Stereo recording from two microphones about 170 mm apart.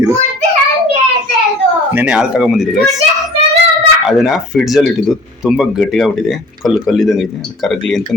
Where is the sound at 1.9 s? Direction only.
10° right (ahead or behind).